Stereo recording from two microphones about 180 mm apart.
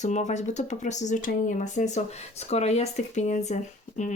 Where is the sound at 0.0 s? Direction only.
40° left (ahead or behind).